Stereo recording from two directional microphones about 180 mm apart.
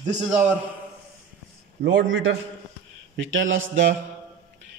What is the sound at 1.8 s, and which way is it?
A man's voice, 90° right.